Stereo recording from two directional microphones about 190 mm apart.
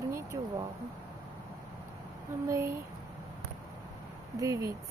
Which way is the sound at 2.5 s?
15° right (ahead or behind).